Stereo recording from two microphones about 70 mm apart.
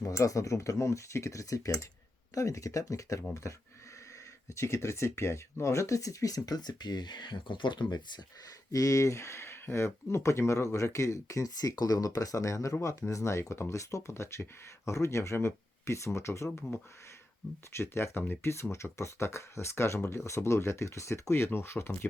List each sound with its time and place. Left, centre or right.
0.0 s speech: left
8.7 s speech: left
17.7 s speech: left